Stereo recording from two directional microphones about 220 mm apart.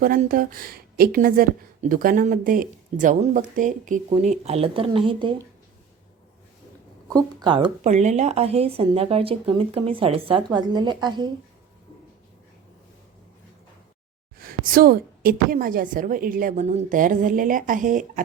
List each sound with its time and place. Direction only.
0.0 s a woman's voice: 40° right (ahead or behind); by 5.4 s 20° right (ahead or behind)
7.1 s a woman's voice: 15° right (ahead or behind)
7.9 s a woman's voice: 30° right (ahead or behind)
14.3 s a woman's voice: 40° right (ahead or behind)